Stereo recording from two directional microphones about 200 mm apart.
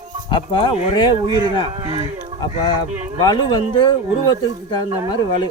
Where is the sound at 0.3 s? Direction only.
25° left (ahead or behind).